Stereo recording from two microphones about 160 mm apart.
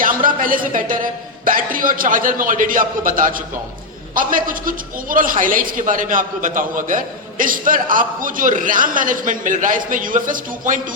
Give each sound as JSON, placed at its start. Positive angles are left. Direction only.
{"t": 0.0, "sound": "a man's voice", "side_deg": -60}